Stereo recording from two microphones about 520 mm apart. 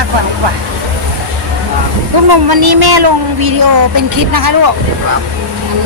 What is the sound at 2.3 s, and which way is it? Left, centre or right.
Speech, right.